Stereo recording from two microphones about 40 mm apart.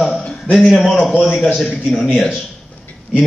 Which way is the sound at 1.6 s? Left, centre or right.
Left.